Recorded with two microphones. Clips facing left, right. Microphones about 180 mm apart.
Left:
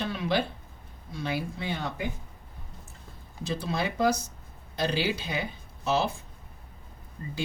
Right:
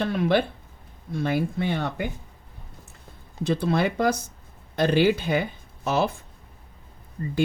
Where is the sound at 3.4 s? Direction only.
60° right (ahead or behind).